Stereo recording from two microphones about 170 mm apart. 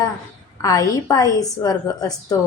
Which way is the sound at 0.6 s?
20° left (ahead or behind).